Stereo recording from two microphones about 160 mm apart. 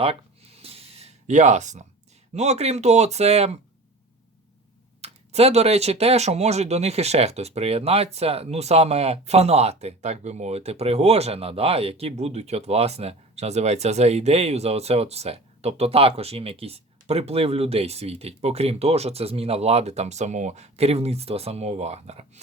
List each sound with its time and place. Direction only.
0.0 s a sound: 35° right (ahead or behind)
2.3 s speech: 45° right (ahead or behind)
4.9 s speech: 40° right (ahead or behind)